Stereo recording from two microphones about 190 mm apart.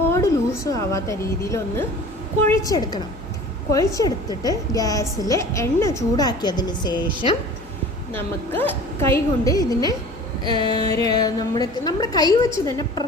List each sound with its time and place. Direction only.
0.1 s a woman's voice: 15° left (ahead or behind)
8.1 s a woman's voice: 10° left (ahead or behind)